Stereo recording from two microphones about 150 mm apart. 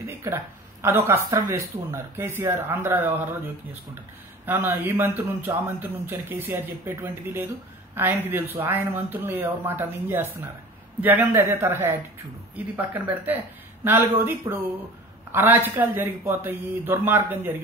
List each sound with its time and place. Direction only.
0.0 s a sound: 20° right (ahead or behind)
0.8 s speech: 15° right (ahead or behind)
4.5 s speech: 15° right (ahead or behind)